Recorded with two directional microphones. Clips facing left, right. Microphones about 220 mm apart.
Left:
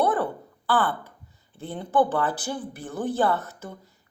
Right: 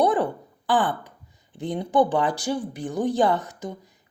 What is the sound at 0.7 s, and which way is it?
Speech, 15° right (ahead or behind).